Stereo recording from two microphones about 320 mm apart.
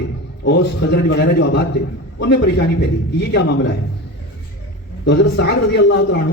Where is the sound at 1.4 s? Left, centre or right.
Left.